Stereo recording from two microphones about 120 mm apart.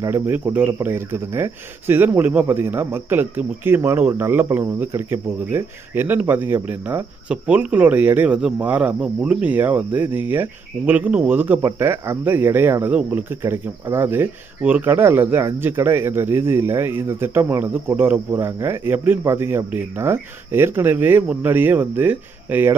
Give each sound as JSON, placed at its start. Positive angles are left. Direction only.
{"t": 0.1, "sound": "speech", "side_deg": -15}